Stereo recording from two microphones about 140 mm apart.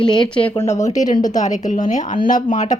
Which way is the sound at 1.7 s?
60° left (ahead or behind).